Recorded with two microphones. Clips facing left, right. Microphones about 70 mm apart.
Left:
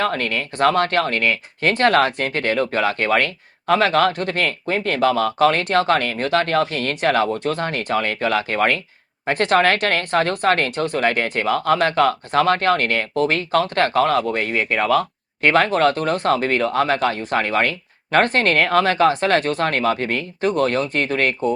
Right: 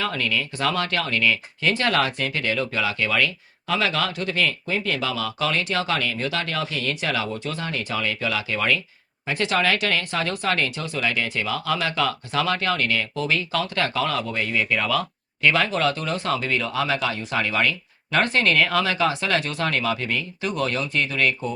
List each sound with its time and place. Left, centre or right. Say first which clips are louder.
0.0 s speech: left 4 dB; left